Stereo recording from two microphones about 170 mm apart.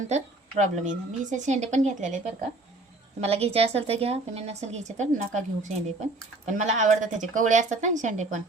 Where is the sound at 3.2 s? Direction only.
35° right (ahead or behind).